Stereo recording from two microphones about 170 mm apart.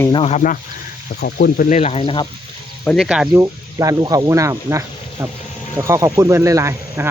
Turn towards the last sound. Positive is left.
turn(degrees=-15)  # may be behind; listen again after turning